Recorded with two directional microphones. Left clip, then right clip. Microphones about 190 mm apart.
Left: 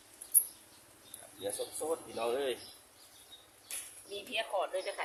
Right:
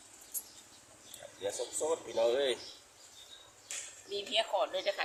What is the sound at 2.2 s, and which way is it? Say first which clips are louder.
Speech: right 5 dB; 5° right (ahead or behind).